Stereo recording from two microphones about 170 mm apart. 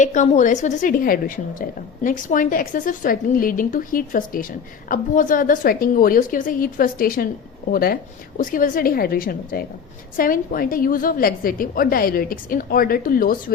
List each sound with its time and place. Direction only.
0.0 s a woman's voice: 45° left (ahead or behind)